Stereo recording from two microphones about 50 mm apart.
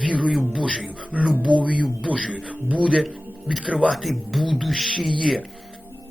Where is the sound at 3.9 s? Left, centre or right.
Centre.